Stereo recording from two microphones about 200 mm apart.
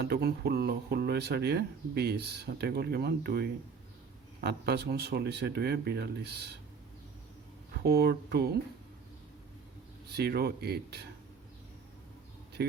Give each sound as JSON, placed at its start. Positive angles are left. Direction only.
{"t": 0.0, "sound": "speech", "side_deg": -55}
{"t": 7.9, "sound": "speech", "side_deg": -50}
{"t": 10.2, "sound": "speech", "side_deg": -55}